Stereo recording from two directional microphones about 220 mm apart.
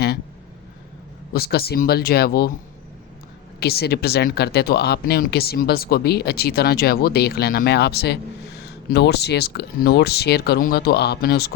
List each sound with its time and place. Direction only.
1.3 s speech: 45° left (ahead or behind)
3.6 s speech: 45° left (ahead or behind)